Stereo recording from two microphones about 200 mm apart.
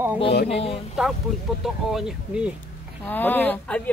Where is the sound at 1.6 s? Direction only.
Centre (ahead or behind).